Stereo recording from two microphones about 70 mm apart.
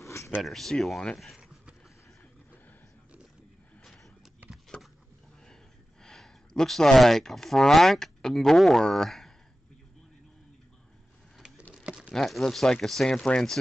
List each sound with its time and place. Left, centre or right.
0.0 s a sound: left
0.4 s speech: centre
6.0 s speech: centre
12.1 s speech: centre